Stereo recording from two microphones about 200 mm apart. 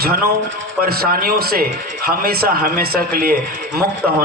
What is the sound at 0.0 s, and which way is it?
A man's voice, 50° right (ahead or behind).